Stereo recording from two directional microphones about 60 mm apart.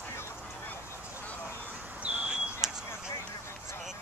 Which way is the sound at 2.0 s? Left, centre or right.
Centre.